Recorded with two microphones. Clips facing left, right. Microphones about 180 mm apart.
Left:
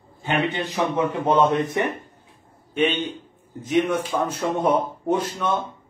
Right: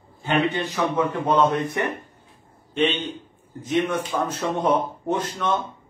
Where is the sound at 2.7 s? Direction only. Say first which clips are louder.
Left 1 dB; 10° left (ahead or behind).